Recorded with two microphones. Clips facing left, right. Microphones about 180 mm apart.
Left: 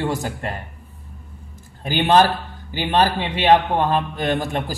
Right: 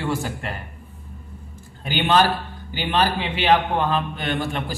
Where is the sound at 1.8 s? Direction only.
45° left (ahead or behind).